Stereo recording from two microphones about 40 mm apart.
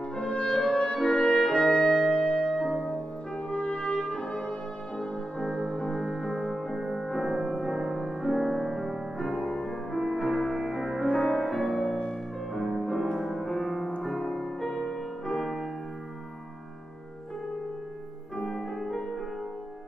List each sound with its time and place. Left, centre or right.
0.1 s music: left
0.6 s clarinet: left; by 2.9 s centre
3.4 s brass instrument: left
6.8 s music: centre
18.4 s music: centre